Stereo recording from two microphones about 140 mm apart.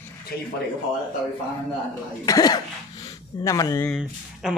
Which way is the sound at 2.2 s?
25° left (ahead or behind).